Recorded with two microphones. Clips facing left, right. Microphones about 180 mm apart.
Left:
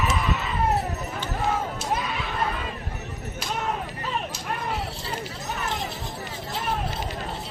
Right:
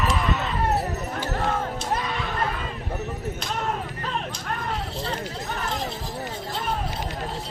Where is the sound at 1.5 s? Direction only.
5° left (ahead or behind).